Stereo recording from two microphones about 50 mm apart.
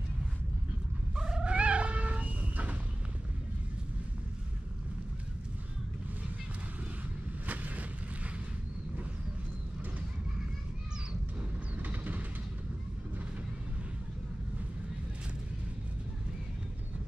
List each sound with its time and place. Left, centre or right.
1.1 s cat: centre
1.5 s cat: right
7.4 s a sound: right
11.8 s vehicle: right